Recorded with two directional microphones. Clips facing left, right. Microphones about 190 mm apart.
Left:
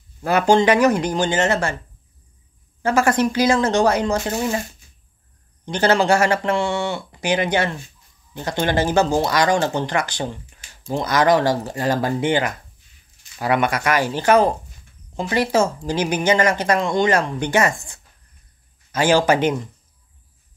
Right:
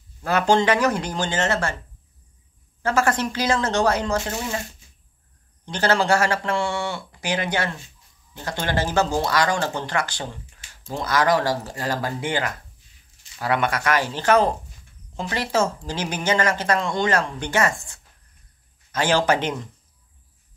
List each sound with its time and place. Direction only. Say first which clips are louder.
0.2 s speech: left 3 dB; 15° left (ahead or behind)
2.8 s speech: left 4 dB; 15° left (ahead or behind)
5.7 s speech: left 3 dB; 20° left (ahead or behind)